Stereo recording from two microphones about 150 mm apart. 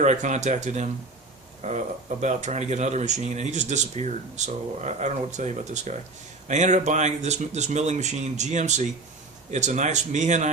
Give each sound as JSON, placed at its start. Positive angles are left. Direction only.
{"t": 0.0, "sound": "speech", "side_deg": -55}